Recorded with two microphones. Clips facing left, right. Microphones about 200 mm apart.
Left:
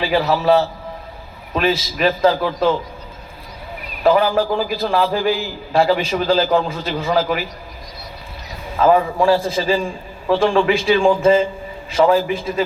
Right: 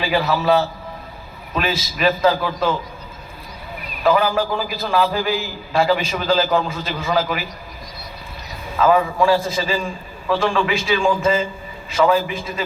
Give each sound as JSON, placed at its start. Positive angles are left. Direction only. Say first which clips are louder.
{"t": 0.0, "sound": "a man's voice", "louder": "left 2 dB", "side_deg": 35}
{"t": 4.0, "sound": "a man's voice", "louder": "left 2 dB", "side_deg": 30}
{"t": 8.7, "sound": "a man's voice", "louder": "left 2 dB", "side_deg": 35}